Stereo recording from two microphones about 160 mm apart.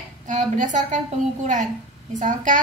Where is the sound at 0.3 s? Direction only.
50° right (ahead or behind).